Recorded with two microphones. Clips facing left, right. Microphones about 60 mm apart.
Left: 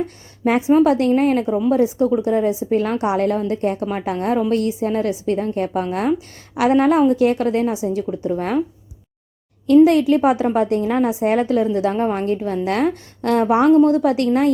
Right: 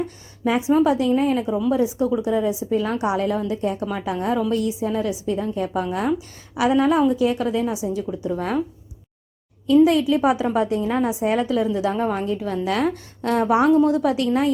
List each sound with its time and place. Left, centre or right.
0.4 s a woman's voice: left
9.6 s a woman's voice: left